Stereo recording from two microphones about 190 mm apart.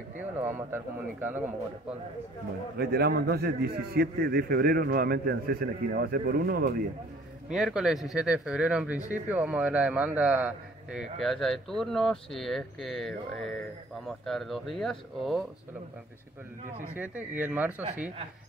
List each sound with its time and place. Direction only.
0.2 s a man's voice: 10° right (ahead or behind)
2.8 s a man's voice: 55° right (ahead or behind)
7.5 s a man's voice: 5° right (ahead or behind)
16.9 s a man's voice: 10° right (ahead or behind)